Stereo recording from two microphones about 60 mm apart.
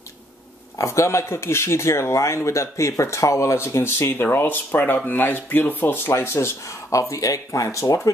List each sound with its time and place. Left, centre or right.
0.7 s speech: left